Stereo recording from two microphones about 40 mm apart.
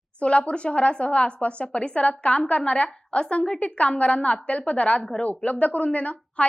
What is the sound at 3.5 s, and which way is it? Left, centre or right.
A woman's voice, left.